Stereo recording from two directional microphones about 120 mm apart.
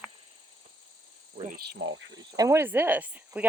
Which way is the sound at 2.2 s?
30° right (ahead or behind).